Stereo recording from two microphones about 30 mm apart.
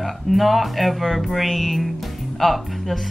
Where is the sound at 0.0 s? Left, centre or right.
Centre.